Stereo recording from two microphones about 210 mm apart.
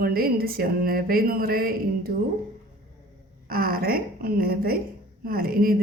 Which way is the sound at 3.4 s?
45° right (ahead or behind).